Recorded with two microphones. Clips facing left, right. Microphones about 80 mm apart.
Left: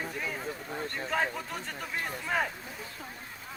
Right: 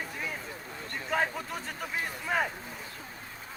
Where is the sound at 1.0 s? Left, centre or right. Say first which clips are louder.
Right 2 dB; centre.